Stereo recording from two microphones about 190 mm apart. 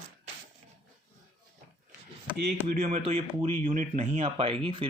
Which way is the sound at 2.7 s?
40° right (ahead or behind).